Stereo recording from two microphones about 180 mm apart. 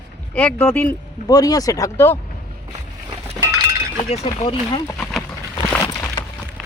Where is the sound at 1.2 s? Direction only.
20° left (ahead or behind).